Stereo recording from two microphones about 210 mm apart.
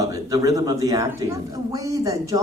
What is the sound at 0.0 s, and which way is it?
A man's voice, 15° right (ahead or behind).